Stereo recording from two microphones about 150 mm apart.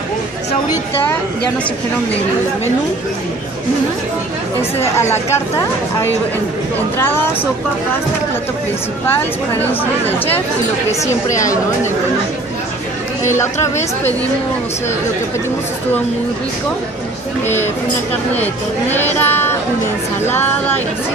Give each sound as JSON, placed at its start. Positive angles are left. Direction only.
{"t": 4.6, "sound": "speech", "side_deg": 15}
{"t": 9.6, "sound": "speech", "side_deg": 15}
{"t": 13.2, "sound": "speech", "side_deg": 20}
{"t": 18.9, "sound": "speech", "side_deg": 15}